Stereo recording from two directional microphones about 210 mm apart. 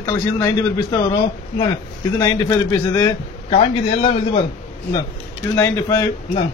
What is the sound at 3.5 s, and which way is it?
Speech, 30° left (ahead or behind).